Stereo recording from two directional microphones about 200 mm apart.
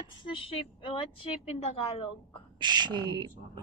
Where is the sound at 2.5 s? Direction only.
20° right (ahead or behind).